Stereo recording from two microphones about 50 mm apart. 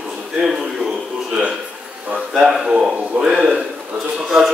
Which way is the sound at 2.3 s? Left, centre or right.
Centre.